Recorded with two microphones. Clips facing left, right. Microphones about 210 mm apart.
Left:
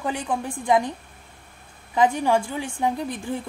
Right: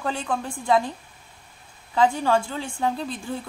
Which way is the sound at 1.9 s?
15° left (ahead or behind).